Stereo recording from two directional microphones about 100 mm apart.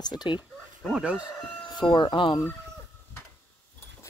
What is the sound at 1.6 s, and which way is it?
Speech, 50° left (ahead or behind).